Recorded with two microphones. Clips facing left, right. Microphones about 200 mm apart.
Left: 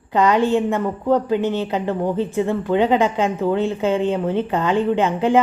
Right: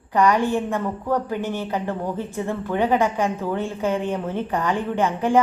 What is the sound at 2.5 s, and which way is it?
A woman's voice, 20° left (ahead or behind).